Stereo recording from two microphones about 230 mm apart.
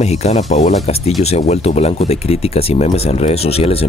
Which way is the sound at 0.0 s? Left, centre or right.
Left.